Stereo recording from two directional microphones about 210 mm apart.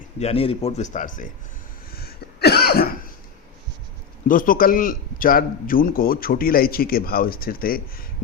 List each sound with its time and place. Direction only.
0.2 s speech: 30° left (ahead or behind)
1.9 s cough: 45° left (ahead or behind)
4.3 s a man's voice: 40° left (ahead or behind)